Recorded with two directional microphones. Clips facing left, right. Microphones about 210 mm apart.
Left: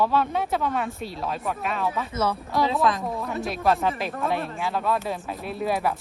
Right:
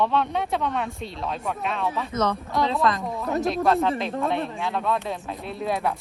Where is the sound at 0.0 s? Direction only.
5° left (ahead or behind).